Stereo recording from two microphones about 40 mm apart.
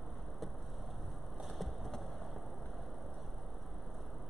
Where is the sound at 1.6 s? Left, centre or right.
Centre.